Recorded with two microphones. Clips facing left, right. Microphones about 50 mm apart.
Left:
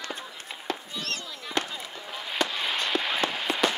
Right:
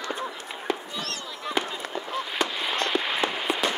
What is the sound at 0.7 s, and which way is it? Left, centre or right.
Fireworks, centre.